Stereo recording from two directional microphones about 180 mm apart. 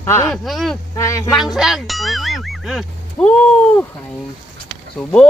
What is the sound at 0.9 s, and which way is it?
Speech, 20° left (ahead or behind).